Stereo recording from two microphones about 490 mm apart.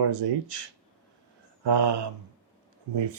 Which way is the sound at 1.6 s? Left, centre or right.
Right.